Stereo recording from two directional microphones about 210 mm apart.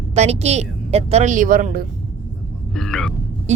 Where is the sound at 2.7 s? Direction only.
Centre (ahead or behind).